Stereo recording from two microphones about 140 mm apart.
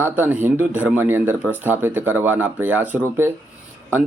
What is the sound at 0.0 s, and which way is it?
Speech, 10° right (ahead or behind).